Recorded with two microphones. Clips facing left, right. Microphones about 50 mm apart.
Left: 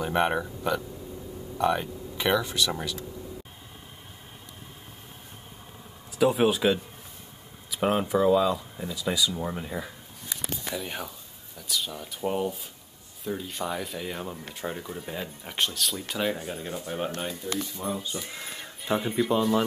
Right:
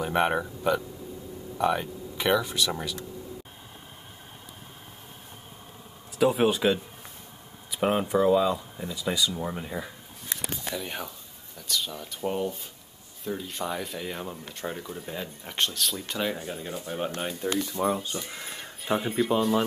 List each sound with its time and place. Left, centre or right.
0.0 s speech: centre
6.1 s speech: centre
17.8 s speech: right
18.1 s speech: centre